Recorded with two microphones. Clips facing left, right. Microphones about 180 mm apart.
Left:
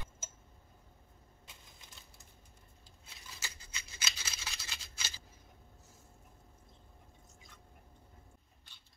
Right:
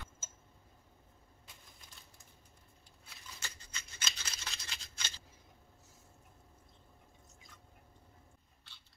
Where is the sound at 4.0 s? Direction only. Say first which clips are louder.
Left 1 dB; 5° left (ahead or behind).